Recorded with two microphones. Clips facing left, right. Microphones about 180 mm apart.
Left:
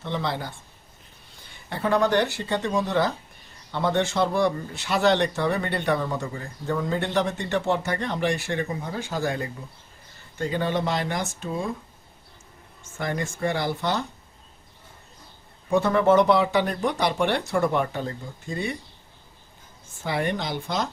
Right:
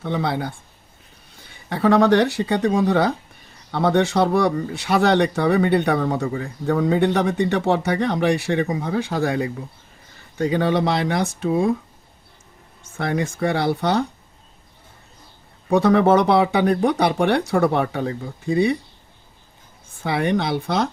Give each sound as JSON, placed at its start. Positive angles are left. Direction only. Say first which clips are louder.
{"t": 0.0, "sound": "speech", "louder": "right 5 dB", "side_deg": -60}
{"t": 1.7, "sound": "speech", "louder": "right 6 dB", "side_deg": -70}
{"t": 13.0, "sound": "speech", "louder": "right 5 dB", "side_deg": -65}
{"t": 15.7, "sound": "speech", "louder": "right 4 dB", "side_deg": -70}
{"t": 20.0, "sound": "speech", "louder": "right 6 dB", "side_deg": -65}